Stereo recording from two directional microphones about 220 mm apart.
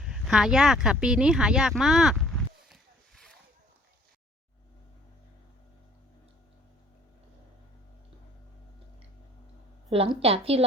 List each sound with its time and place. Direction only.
0.0 s speech: centre (ahead or behind)
2.6 s a sound: centre (ahead or behind)
9.9 s a woman's voice: 25° right (ahead or behind)